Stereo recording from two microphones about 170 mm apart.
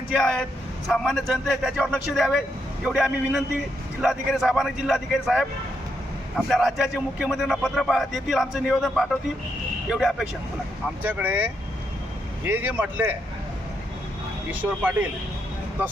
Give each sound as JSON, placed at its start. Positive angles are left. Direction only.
{"t": 0.1, "sound": "a man's voice", "side_deg": 0}
{"t": 14.5, "sound": "speech", "side_deg": -10}